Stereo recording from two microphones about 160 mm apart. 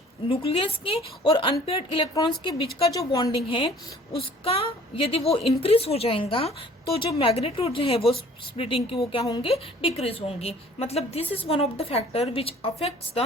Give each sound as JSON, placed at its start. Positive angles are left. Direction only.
{"t": 0.3, "sound": "a woman's voice", "side_deg": 35}
{"t": 3.3, "sound": "a woman's voice", "side_deg": 35}